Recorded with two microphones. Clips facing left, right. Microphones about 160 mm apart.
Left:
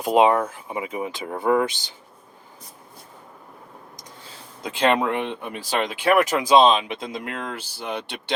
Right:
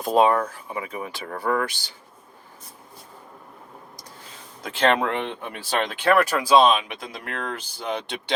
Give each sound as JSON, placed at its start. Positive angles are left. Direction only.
{"t": 0.0, "sound": "speech", "side_deg": 15}
{"t": 4.6, "sound": "speech", "side_deg": 15}